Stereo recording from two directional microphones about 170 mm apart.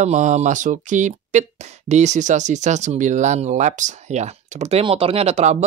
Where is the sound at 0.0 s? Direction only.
45° right (ahead or behind).